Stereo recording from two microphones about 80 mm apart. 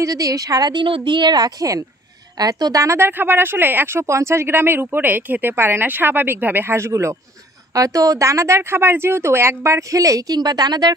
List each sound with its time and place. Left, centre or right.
0.0 s a woman's voice: right
3.0 s speech: right
7.7 s speech: right